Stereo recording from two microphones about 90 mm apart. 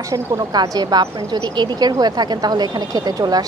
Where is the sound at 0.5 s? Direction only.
50° right (ahead or behind).